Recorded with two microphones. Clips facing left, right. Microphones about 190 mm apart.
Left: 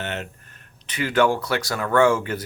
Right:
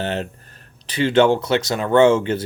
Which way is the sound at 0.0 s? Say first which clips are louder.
Right 6 dB; 30° right (ahead or behind).